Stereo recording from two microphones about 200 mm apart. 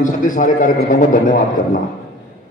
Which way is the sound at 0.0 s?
40° left (ahead or behind).